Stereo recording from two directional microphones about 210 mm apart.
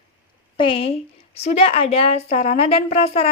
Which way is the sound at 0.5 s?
25° left (ahead or behind).